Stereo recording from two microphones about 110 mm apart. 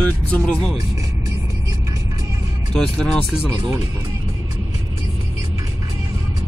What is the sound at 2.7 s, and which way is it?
Speech, 5° left (ahead or behind).